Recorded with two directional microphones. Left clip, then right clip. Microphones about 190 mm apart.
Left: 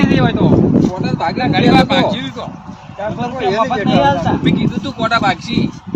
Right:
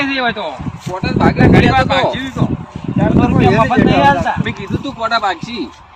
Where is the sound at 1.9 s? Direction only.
20° left (ahead or behind).